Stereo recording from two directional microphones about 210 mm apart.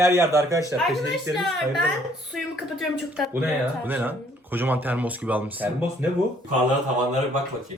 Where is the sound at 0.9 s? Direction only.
Centre (ahead or behind).